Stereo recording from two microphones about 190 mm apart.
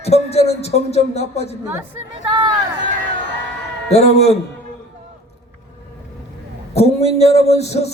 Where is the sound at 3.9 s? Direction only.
35° left (ahead or behind).